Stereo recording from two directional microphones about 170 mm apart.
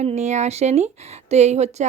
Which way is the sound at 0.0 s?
40° right (ahead or behind).